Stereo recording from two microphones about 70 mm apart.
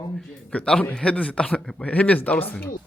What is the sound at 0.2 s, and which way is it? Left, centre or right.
A man's voice, centre.